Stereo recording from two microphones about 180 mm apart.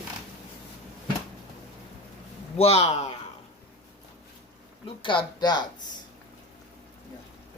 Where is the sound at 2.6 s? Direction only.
35° left (ahead or behind).